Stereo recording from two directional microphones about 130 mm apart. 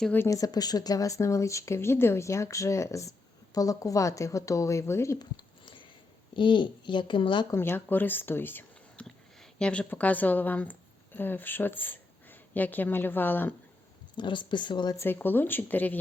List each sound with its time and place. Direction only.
0.3 s speech: 25° left (ahead or behind)
5.2 s a sound: 40° left (ahead or behind)
6.3 s a child's voice: 40° left (ahead or behind)
7.5 s speech: 20° left (ahead or behind)
14.2 s a child's voice: 35° left (ahead or behind)
14.9 s speech: 15° left (ahead or behind)